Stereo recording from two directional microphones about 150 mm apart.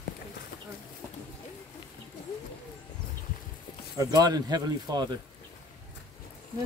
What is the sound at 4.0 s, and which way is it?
Speech, 25° right (ahead or behind).